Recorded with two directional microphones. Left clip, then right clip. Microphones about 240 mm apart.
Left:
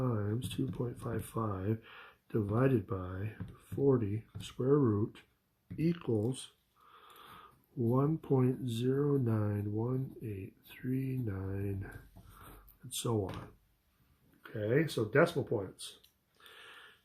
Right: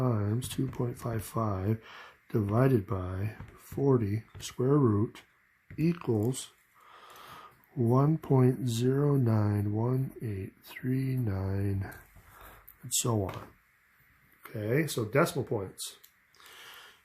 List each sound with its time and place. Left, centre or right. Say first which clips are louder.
0.0 s speech: right 4 dB; right
6.9 s a sound: right 5 dB; right
7.9 s speech: right 4 dB; right
14.5 s speech: right 1 dB; right
16.5 s gasp: right 4 dB; right